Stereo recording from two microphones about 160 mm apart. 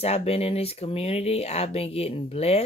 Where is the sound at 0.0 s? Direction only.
40° left (ahead or behind).